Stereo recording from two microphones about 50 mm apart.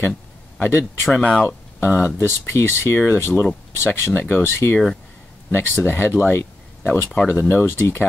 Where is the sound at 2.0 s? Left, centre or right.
Left.